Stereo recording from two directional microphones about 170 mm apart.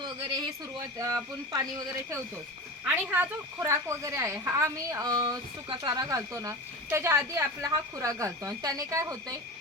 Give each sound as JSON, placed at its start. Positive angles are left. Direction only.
{"t": 0.0, "sound": "a sound", "side_deg": -20}
{"t": 0.9, "sound": "speech", "side_deg": -20}
{"t": 2.8, "sound": "a woman's voice", "side_deg": -10}